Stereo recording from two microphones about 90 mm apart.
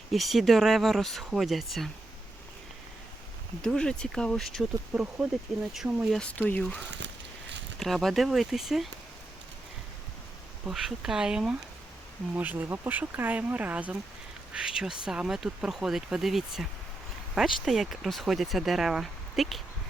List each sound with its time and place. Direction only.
0.1 s speech: centre (ahead or behind)
3.6 s speech: 10° left (ahead or behind)
4.9 s speech: 10° right (ahead or behind)
6.1 s speech: 20° left (ahead or behind)
7.8 s speech: centre (ahead or behind)
10.7 s speech: 5° right (ahead or behind)